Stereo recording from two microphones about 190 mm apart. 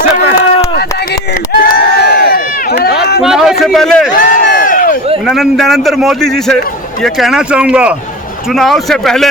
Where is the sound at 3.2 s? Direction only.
Centre (ahead or behind).